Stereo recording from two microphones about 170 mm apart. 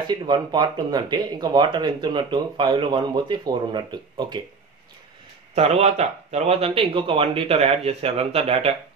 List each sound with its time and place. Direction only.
0.0 s speech: 25° right (ahead or behind)
5.5 s speech: 40° right (ahead or behind)